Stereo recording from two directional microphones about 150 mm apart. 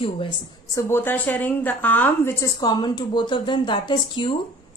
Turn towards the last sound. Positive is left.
turn(degrees=30)  # may be behind; listen again after turning